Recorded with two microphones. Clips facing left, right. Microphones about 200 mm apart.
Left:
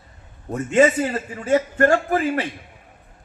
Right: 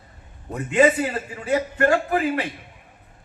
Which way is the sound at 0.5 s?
45° left (ahead or behind).